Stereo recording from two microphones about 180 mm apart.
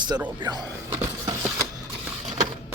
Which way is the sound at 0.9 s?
15° right (ahead or behind).